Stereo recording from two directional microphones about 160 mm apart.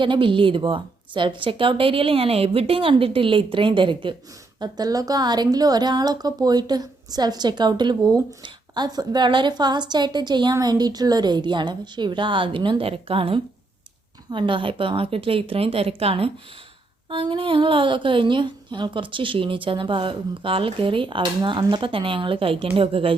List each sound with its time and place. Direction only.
0.0 s a woman's voice: 30° right (ahead or behind)